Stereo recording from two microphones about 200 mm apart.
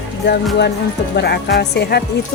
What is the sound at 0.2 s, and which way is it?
Speech, 60° left (ahead or behind).